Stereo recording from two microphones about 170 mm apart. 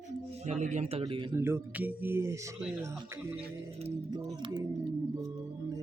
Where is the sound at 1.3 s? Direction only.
15° right (ahead or behind).